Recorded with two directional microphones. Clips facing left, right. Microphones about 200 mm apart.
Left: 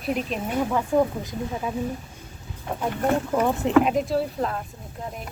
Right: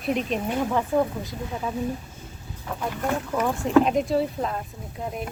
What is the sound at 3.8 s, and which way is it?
Speech, centre (ahead or behind).